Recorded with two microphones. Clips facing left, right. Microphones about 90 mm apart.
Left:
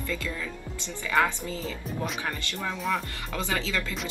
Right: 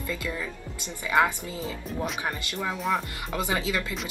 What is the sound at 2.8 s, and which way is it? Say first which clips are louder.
Music: right 2 dB; centre (ahead or behind).